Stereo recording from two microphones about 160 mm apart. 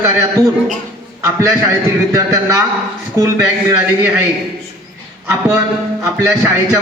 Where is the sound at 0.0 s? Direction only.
20° right (ahead or behind).